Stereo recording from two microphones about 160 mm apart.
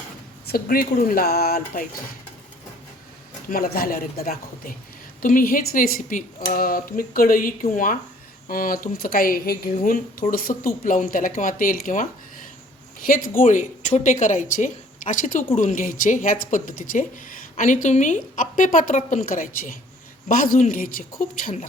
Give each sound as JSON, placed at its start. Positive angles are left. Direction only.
{"t": 0.4, "sound": "speech", "side_deg": 70}
{"t": 3.5, "sound": "speech", "side_deg": 65}